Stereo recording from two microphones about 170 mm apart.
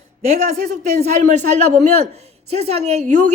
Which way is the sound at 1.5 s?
40° right (ahead or behind).